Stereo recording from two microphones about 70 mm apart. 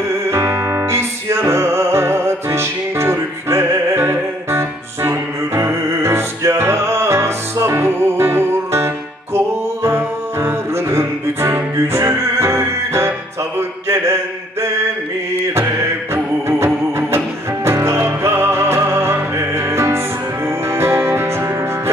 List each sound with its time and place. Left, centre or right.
0.3 s music: right
13.6 s a sound: right
16.4 s music: right